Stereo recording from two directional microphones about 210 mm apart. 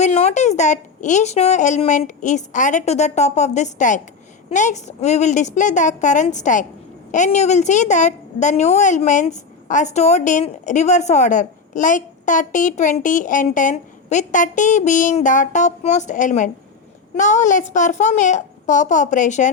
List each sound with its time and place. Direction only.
0.0 s a woman's voice: 30° left (ahead or behind)